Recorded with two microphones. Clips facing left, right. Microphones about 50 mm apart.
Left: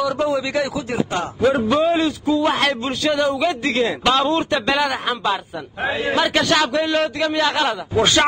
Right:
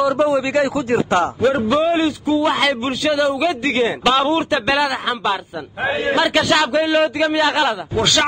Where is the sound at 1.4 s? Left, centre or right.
Centre.